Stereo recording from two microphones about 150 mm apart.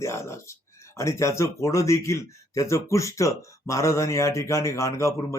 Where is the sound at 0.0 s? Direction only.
20° left (ahead or behind).